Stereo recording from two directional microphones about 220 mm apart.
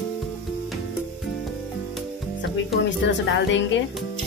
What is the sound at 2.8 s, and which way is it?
Speech, 55° left (ahead or behind).